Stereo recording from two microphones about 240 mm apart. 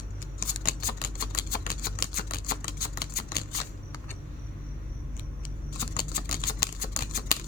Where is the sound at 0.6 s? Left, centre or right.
Left.